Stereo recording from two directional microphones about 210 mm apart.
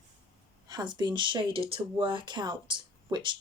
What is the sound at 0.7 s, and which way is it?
Speech, 20° right (ahead or behind).